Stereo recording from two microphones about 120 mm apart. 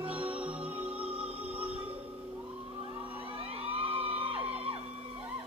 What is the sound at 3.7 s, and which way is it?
Music, 50° right (ahead or behind).